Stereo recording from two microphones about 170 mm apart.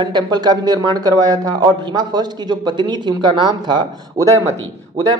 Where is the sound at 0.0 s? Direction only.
25° right (ahead or behind).